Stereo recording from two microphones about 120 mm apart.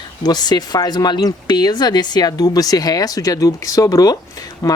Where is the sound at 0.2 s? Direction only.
35° left (ahead or behind).